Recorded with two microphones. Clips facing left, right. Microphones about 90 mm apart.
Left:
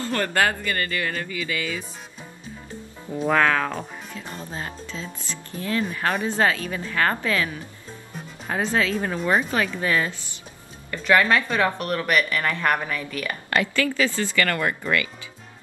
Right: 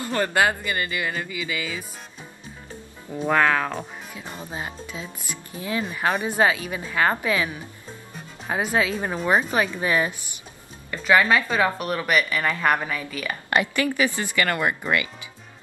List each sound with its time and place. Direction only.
0.0 s speech: 15° right (ahead or behind)
3.3 s speech: 5° right (ahead or behind)
13.5 s speech: 20° right (ahead or behind)